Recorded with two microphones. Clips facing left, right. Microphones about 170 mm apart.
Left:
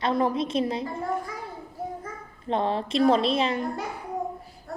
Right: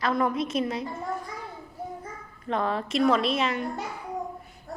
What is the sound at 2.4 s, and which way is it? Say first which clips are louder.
A woman's voice: left 2 dB; 30° left (ahead or behind).